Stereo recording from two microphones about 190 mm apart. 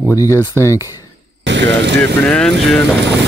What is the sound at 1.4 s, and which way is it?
Speech, 70° right (ahead or behind).